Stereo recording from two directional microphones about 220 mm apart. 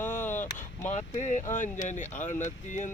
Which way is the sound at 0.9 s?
35° left (ahead or behind).